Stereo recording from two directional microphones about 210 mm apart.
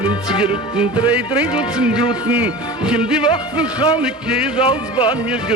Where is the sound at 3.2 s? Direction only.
20° left (ahead or behind).